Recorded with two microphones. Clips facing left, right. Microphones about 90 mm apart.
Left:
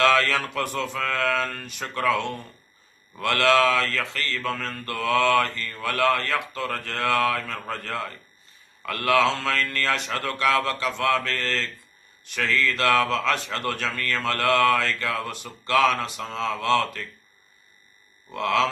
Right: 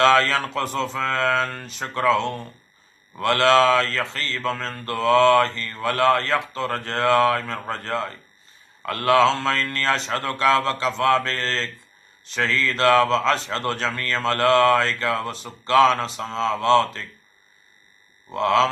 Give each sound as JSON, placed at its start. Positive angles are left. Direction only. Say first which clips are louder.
{"t": 0.0, "sound": "speech", "louder": "right 3 dB", "side_deg": -25}
{"t": 18.3, "sound": "speech", "louder": "right 4 dB", "side_deg": -30}